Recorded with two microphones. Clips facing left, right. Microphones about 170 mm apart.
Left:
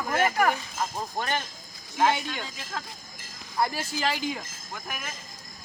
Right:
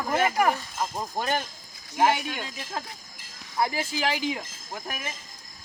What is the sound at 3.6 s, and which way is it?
Speech, 15° right (ahead or behind).